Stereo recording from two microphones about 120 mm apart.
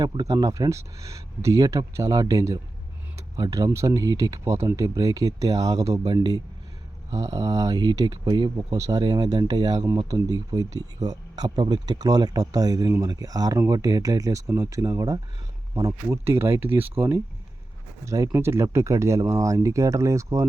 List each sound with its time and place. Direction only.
0.0 s speech: 35° right (ahead or behind)